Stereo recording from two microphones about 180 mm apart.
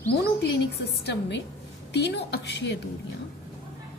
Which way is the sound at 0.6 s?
75° left (ahead or behind).